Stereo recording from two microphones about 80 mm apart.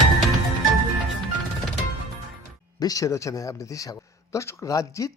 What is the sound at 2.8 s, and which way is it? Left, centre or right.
A man's voice, left.